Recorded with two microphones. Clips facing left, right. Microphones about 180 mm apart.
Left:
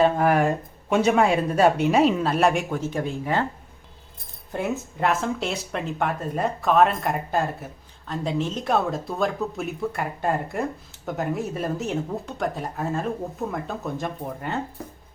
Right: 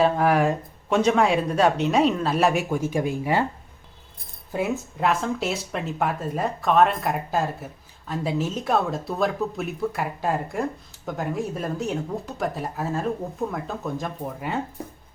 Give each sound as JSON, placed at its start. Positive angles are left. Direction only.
{"t": 0.0, "sound": "speech", "side_deg": 0}
{"t": 4.5, "sound": "speech", "side_deg": 0}